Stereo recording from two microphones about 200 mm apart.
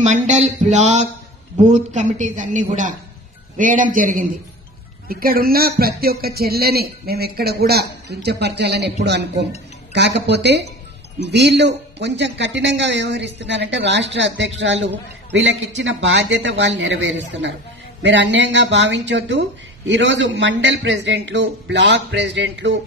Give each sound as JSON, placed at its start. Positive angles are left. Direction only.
{"t": 0.0, "sound": "a woman's voice", "side_deg": -35}